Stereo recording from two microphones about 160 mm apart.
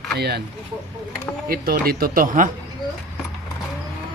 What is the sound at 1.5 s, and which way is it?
Speech, 70° right (ahead or behind).